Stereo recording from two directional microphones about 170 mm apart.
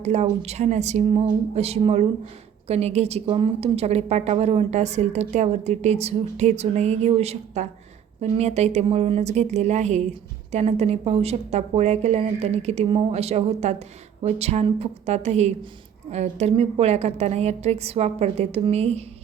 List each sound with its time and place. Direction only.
0.0 s a woman's voice: 40° right (ahead or behind)